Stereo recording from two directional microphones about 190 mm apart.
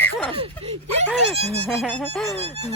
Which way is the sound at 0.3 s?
35° right (ahead or behind).